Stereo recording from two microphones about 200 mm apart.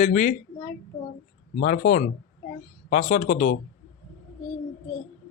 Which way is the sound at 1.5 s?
40° left (ahead or behind).